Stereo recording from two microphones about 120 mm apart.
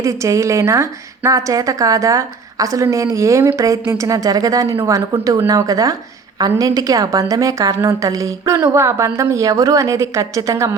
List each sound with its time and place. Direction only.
0.0 s a woman's voice: 25° right (ahead or behind)